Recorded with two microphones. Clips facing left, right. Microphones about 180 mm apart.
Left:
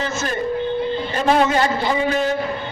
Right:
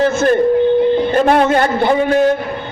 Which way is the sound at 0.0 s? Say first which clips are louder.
Right 11 dB; 55° right (ahead or behind).